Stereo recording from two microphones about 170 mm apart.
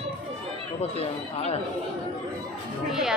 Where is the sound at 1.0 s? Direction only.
35° left (ahead or behind).